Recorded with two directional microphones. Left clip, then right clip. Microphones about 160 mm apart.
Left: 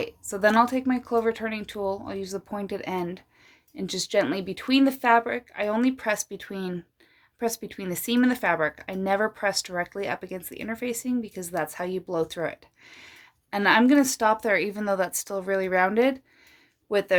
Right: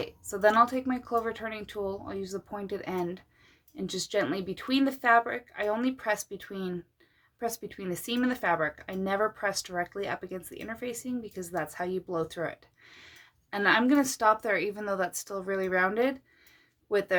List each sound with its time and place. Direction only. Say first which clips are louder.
0.0 s speech: left 2 dB; 40° left (ahead or behind)